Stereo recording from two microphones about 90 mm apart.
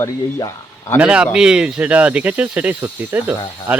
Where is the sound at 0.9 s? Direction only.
10° right (ahead or behind).